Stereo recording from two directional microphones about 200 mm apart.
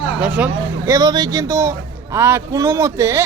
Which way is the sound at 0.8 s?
15° right (ahead or behind).